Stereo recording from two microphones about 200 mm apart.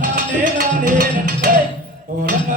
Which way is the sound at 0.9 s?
45° right (ahead or behind).